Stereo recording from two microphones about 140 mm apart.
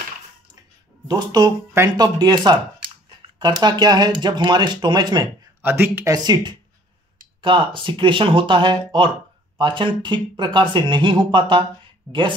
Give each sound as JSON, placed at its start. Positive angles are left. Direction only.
{"t": 1.0, "sound": "speech", "side_deg": -25}
{"t": 5.6, "sound": "speech", "side_deg": -15}
{"t": 6.1, "sound": "speech", "side_deg": -30}